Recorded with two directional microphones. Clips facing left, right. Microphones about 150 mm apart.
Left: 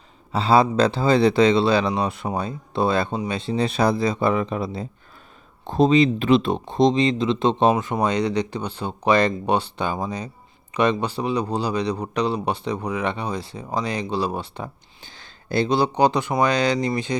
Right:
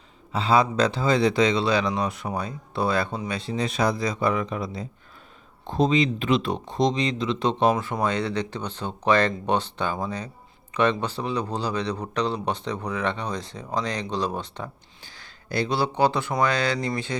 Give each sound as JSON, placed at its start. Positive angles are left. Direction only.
{"t": 0.3, "sound": "speech", "side_deg": 35}
{"t": 15.0, "sound": "speech", "side_deg": 25}